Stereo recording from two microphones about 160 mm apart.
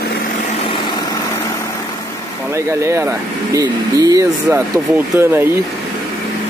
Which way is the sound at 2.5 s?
15° right (ahead or behind).